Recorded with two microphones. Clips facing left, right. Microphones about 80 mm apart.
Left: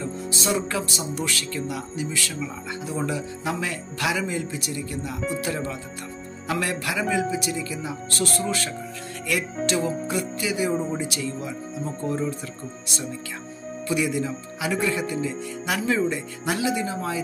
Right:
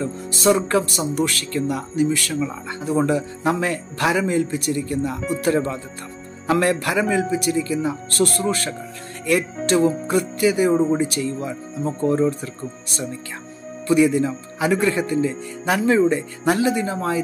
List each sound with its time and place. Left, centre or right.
0.3 s speech: right
13.8 s speech: right